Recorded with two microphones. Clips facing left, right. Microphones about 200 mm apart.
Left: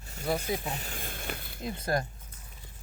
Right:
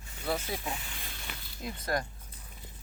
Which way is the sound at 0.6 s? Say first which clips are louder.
Left 2 dB; 45° left (ahead or behind).